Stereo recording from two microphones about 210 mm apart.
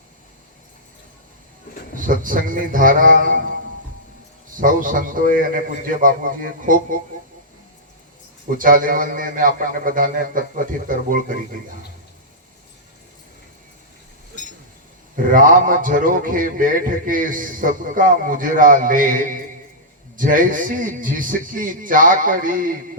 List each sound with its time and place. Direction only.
2.0 s a man's voice: 40° right (ahead or behind)
4.5 s a man's voice: 40° right (ahead or behind)
8.5 s a man's voice: 40° right (ahead or behind)
15.1 s a man's voice: 40° right (ahead or behind)